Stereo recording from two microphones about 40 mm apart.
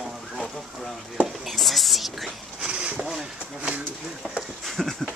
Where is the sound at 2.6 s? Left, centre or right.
Right.